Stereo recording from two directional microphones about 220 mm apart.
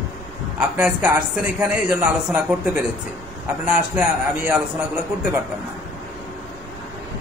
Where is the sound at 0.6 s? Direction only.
5° right (ahead or behind).